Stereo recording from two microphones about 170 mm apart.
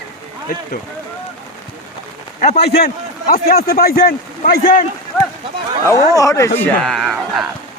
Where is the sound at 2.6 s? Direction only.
70° left (ahead or behind).